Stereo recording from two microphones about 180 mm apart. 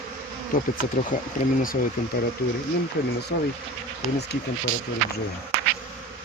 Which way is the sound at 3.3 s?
60° left (ahead or behind).